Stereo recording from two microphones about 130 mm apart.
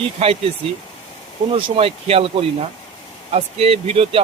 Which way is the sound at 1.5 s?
45° right (ahead or behind).